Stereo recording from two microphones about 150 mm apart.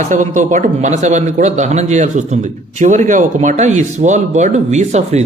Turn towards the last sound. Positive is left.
turn(degrees=-50)  # may be behind; listen again after turning